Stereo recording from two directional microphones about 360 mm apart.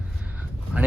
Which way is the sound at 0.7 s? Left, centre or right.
Centre.